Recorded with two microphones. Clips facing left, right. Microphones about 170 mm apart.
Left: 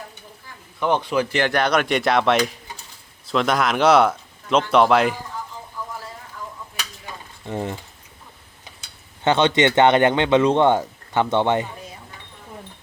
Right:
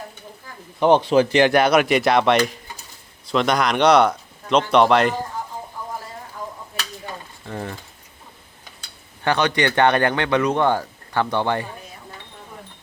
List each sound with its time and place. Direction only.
0.8 s speech: 25° right (ahead or behind)
1.4 s speech: 10° right (ahead or behind); by 5.1 s 5° left (ahead or behind)
7.4 s speech: 20° left (ahead or behind)
9.2 s speech: 25° left (ahead or behind)